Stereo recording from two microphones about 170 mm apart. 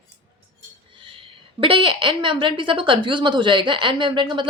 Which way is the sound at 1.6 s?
30° right (ahead or behind).